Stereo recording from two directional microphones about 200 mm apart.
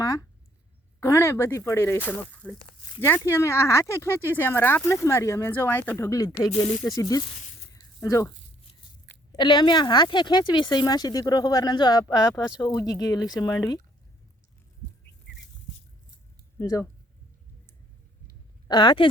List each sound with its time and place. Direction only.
0.0 s a sound: 20° left (ahead or behind)
0.9 s speech: 15° left (ahead or behind)
7.7 s a sound: 20° left (ahead or behind)
9.3 s speech: 20° left (ahead or behind)
16.6 s speech: 15° left (ahead or behind)
18.7 s speech: 25° left (ahead or behind)